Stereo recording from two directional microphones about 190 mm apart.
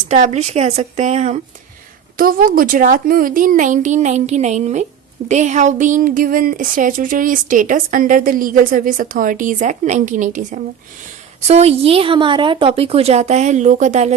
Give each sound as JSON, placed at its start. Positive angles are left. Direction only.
{"t": 0.1, "sound": "a woman's voice", "side_deg": -35}
{"t": 2.1, "sound": "a woman's voice", "side_deg": -45}